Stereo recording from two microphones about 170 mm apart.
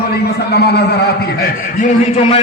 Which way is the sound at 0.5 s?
70° left (ahead or behind).